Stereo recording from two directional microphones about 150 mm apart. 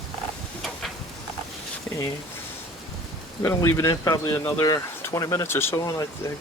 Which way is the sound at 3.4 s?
20° left (ahead or behind).